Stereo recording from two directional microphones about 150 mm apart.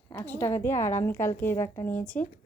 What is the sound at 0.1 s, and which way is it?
A woman's voice, 15° left (ahead or behind).